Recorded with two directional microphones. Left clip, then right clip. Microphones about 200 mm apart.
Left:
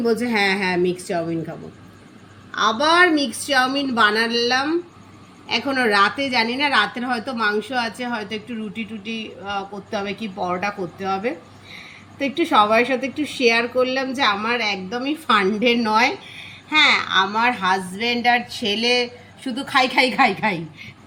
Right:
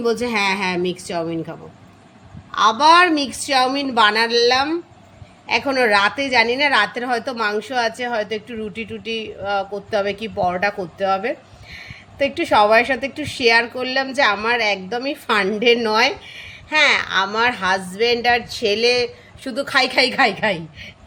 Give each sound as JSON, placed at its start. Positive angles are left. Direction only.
{"t": 0.0, "sound": "a woman's voice", "side_deg": -35}
{"t": 3.0, "sound": "a woman's voice", "side_deg": -40}